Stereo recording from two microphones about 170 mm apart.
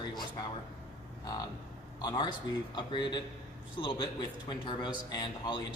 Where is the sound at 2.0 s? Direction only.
25° left (ahead or behind).